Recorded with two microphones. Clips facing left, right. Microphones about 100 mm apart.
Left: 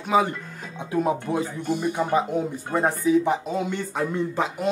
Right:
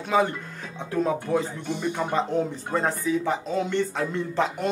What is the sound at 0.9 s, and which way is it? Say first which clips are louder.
Speech: left 1 dB; 15° left (ahead or behind).